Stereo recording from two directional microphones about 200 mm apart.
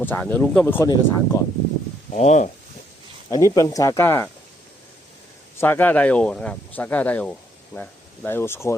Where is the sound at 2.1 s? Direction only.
35° left (ahead or behind).